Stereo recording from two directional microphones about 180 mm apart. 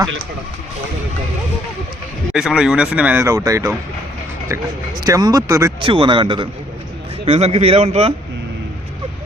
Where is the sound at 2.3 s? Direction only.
5° right (ahead or behind).